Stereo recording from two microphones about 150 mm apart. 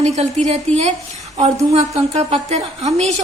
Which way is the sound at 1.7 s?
45° right (ahead or behind).